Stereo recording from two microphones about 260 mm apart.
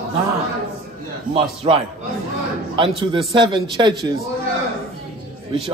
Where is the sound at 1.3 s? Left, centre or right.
Right.